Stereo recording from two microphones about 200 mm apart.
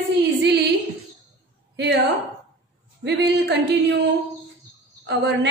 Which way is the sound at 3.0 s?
55° right (ahead or behind).